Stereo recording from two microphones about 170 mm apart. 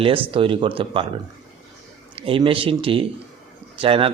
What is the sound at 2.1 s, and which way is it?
Speech, 30° right (ahead or behind).